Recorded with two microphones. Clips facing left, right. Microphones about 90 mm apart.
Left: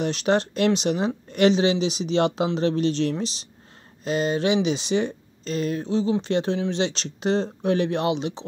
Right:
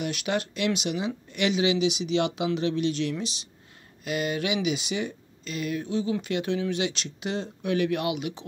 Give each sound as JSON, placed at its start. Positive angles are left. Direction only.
{"t": 0.0, "sound": "speech", "side_deg": 35}